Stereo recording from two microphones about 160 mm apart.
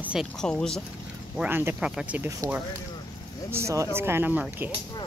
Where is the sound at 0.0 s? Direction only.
5° right (ahead or behind).